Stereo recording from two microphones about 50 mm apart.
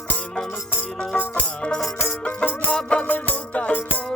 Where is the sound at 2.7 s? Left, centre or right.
Centre.